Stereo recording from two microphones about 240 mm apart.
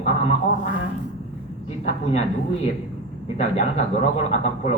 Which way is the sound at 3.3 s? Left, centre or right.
Left.